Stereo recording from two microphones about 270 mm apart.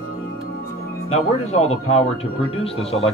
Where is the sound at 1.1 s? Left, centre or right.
Left.